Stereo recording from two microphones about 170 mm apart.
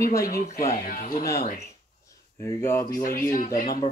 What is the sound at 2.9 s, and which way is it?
Speech, 55° left (ahead or behind).